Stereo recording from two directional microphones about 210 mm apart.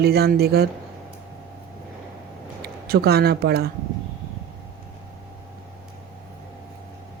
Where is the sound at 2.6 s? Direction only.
50° right (ahead or behind).